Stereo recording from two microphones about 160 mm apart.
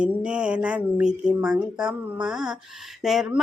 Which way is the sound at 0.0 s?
5° right (ahead or behind).